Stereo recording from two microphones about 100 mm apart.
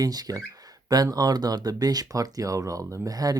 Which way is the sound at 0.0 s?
40° right (ahead or behind).